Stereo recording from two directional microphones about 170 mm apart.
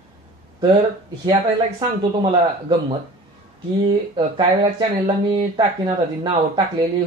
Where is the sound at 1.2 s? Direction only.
25° right (ahead or behind).